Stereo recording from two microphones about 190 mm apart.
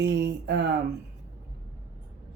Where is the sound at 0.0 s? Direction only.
65° right (ahead or behind).